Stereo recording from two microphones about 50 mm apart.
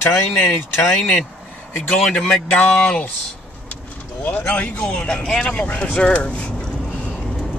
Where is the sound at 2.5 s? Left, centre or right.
Left.